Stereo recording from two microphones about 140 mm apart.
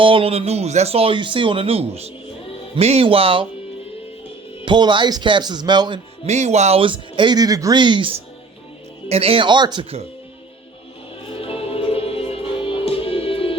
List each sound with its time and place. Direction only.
0.0 s speech: 40° right (ahead or behind)
4.6 s speech: 35° right (ahead or behind)
6.2 s speech: 55° right (ahead or behind); by 9.8 s 35° right (ahead or behind)
11.3 s music: 40° left (ahead or behind)